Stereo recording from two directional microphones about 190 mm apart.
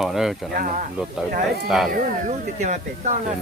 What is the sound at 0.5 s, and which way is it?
Speech, 50° right (ahead or behind).